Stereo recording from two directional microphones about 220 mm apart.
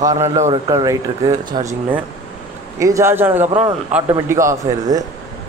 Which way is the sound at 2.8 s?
15° right (ahead or behind).